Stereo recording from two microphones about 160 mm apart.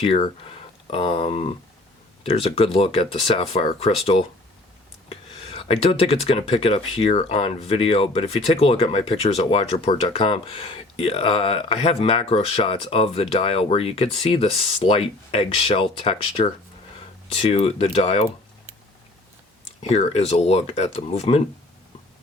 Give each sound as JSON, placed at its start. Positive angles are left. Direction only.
{"t": 0.0, "sound": "speech", "side_deg": 35}
{"t": 19.8, "sound": "speech", "side_deg": 45}